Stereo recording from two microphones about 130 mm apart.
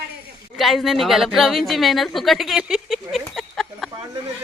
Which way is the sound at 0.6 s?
Centre (ahead or behind).